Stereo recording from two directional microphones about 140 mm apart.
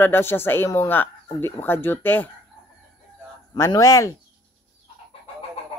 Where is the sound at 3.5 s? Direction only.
25° left (ahead or behind).